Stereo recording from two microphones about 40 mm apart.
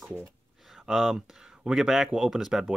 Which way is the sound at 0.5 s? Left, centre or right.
Centre.